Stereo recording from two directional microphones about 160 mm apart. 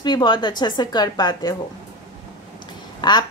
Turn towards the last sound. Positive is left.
turn(degrees=25)  # may be behind; listen again after turning